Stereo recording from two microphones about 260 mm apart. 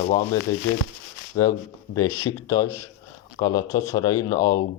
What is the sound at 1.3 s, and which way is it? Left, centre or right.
Speech, centre.